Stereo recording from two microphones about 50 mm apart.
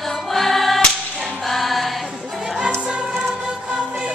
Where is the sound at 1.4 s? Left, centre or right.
Centre.